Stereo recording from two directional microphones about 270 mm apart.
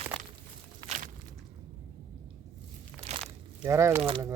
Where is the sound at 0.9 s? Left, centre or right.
Right.